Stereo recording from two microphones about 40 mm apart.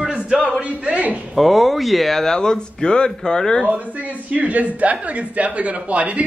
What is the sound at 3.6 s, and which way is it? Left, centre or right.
Speech, right.